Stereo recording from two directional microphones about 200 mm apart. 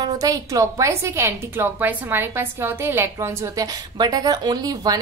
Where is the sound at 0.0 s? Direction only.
15° right (ahead or behind).